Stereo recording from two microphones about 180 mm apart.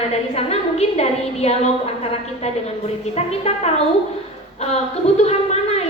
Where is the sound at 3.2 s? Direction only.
35° left (ahead or behind).